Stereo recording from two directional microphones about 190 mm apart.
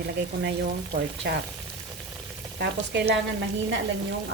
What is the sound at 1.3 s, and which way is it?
Speech, 60° right (ahead or behind).